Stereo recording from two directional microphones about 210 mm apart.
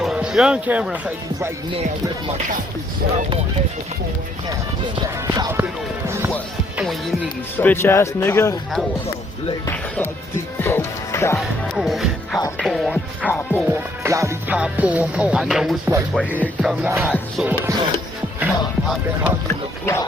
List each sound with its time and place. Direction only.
0.0 s speech: 5° right (ahead or behind)
5.3 s music: 15° right (ahead or behind)
6.7 s speech: centre (ahead or behind)
10.6 s speech: 10° left (ahead or behind)
11.3 s music: centre (ahead or behind)
13.7 s music: 10° right (ahead or behind)
19.8 s speech: 15° left (ahead or behind)